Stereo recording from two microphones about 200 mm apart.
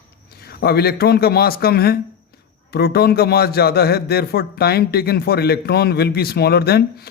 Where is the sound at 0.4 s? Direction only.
50° left (ahead or behind).